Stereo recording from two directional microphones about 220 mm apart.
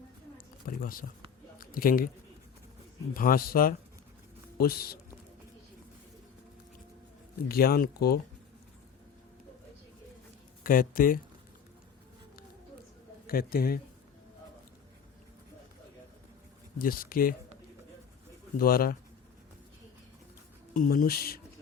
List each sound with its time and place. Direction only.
0.3 s a sound: 40° left (ahead or behind)
3.2 s speech: 40° left (ahead or behind)
7.4 s speech: 45° left (ahead or behind)
10.6 s speech: 40° left (ahead or behind)
13.2 s speech: 40° left (ahead or behind)
16.7 s speech: 40° left (ahead or behind)
18.5 s speech: 40° left (ahead or behind)
20.7 s speech: 40° left (ahead or behind)